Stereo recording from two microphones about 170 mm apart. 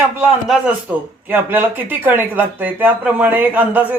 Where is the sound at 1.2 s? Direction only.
10° right (ahead or behind).